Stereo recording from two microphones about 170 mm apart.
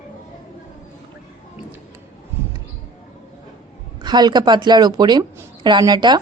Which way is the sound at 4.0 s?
25° right (ahead or behind).